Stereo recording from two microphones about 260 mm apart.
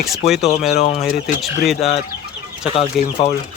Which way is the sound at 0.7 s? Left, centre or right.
Left.